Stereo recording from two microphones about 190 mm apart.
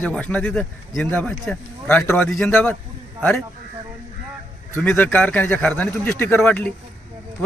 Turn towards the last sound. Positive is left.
turn(degrees=10)  # may be behind; listen again after turning